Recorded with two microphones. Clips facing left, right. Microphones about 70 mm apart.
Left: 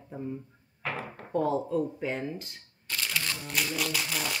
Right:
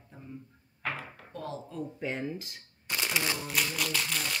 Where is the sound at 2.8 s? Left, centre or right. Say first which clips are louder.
Right 2 dB; centre.